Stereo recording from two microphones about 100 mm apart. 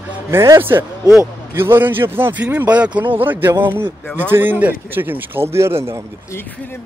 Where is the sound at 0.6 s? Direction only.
20° right (ahead or behind).